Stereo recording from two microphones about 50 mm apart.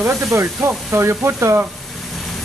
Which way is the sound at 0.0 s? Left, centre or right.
Right.